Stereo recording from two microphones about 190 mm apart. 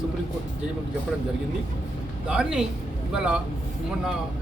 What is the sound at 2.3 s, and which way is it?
A man's voice, 5° right (ahead or behind).